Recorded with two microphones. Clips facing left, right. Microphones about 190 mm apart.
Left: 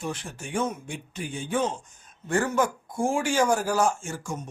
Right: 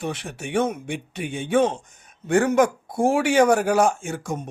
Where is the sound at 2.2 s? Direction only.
75° right (ahead or behind).